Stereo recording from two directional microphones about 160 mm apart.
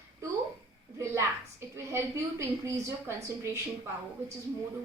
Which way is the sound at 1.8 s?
20° right (ahead or behind).